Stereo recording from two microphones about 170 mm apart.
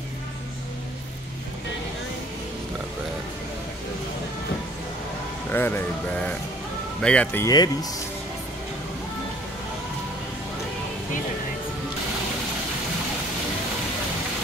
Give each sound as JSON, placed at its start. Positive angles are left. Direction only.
{"t": 5.5, "sound": "speech", "side_deg": 10}
{"t": 7.4, "sound": "speech", "side_deg": 20}